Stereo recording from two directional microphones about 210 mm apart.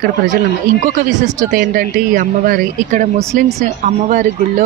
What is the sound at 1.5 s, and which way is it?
Speech, 45° right (ahead or behind).